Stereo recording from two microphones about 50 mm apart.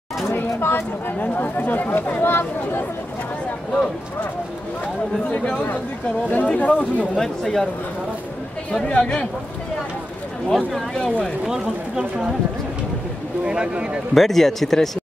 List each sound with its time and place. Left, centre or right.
0.3 s speech: left
1.3 s speech: left
5.2 s speech: left
7.2 s speech: centre
8.8 s speech: left
10.5 s speech: centre
11.4 s speech: centre
13.5 s speech: centre
14.1 s speech: centre